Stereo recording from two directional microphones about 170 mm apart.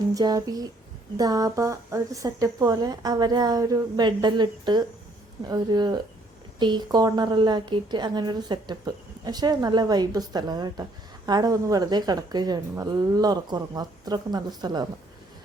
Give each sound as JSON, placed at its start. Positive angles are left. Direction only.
{"t": 0.1, "sound": "a woman's voice", "side_deg": -20}